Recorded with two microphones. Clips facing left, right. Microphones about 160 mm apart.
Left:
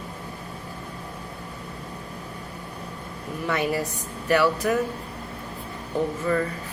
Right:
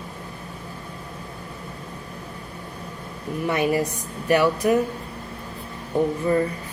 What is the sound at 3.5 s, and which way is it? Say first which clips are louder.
Speech: right 3 dB; 20° right (ahead or behind).